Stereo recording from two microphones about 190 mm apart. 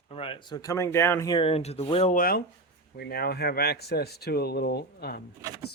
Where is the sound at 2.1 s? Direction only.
50° left (ahead or behind).